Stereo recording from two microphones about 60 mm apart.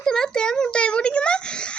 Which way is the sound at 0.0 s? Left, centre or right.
Centre.